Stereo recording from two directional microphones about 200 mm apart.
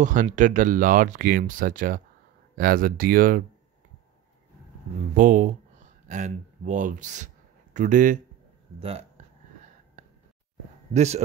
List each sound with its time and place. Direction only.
0.0 s speech: 40° right (ahead or behind)
5.1 s speech: 40° right (ahead or behind)
8.7 s speech: 30° right (ahead or behind)
10.0 s a sound: 35° right (ahead or behind)
10.9 s speech: 35° right (ahead or behind)